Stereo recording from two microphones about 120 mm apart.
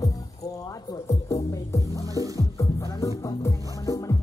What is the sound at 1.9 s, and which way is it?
Music, 30° right (ahead or behind).